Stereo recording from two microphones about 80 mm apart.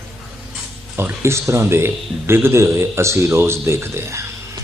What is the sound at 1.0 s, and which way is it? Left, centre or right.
Speech, right.